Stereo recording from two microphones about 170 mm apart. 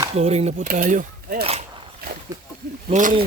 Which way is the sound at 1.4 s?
35° right (ahead or behind).